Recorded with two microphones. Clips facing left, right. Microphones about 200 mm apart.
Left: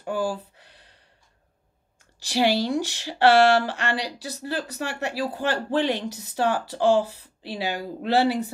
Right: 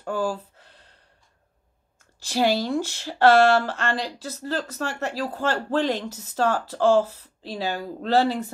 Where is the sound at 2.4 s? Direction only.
45° right (ahead or behind).